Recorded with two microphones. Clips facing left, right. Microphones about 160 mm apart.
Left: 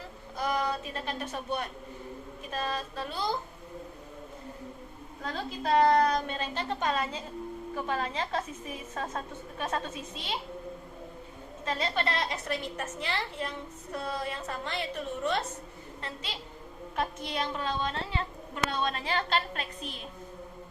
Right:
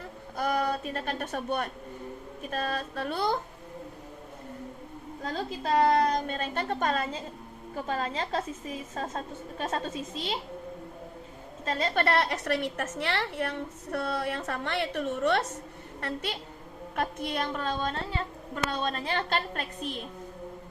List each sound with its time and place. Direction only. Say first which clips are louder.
0.3 s a sound: right 2 dB; 55° right (ahead or behind)
2.5 s speech: right 2 dB; 55° right (ahead or behind)
5.2 s a woman's voice: right 1 dB; 40° right (ahead or behind)
7.8 s a woman's voice: right 2 dB; 40° right (ahead or behind)
11.7 s a woman's voice: right 4 dB; 50° right (ahead or behind)